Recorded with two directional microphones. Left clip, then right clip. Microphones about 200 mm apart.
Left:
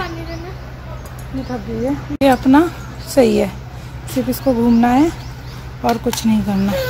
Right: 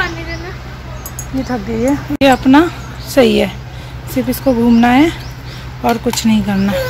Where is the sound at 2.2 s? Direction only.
5° left (ahead or behind).